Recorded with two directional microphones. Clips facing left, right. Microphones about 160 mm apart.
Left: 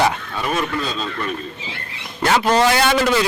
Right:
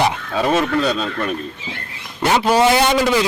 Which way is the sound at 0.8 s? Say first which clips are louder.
Right 6 dB; 70° right (ahead or behind).